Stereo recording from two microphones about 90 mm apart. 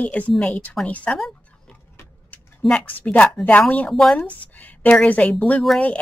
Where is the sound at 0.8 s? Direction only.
15° left (ahead or behind).